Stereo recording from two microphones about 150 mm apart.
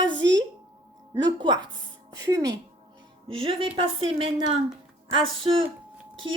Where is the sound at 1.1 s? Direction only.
30° right (ahead or behind).